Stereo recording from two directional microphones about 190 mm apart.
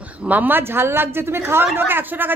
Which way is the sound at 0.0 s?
10° right (ahead or behind).